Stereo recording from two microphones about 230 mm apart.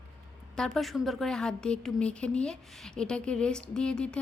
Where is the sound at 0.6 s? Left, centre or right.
Centre.